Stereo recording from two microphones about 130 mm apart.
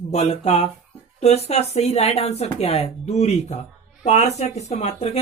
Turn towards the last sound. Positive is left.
turn(degrees=55)  # may be behind; listen again after turning